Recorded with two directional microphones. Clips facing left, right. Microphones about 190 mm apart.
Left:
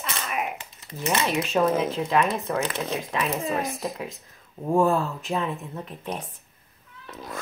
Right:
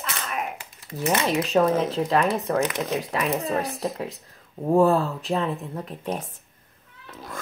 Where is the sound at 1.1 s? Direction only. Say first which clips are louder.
Right 3 dB; 40° right (ahead or behind).